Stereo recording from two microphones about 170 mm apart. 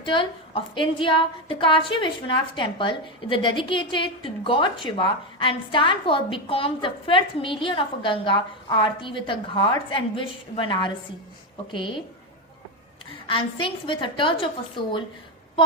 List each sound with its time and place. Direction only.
0.0 s a woman's voice: 30° left (ahead or behind)
13.2 s a woman's voice: 30° left (ahead or behind)